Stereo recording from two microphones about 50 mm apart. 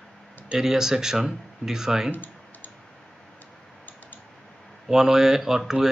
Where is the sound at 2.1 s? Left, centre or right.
Left.